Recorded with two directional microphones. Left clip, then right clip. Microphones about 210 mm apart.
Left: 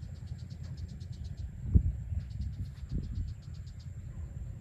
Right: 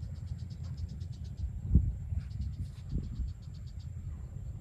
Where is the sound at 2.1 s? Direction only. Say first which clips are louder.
Even; 50° left (ahead or behind).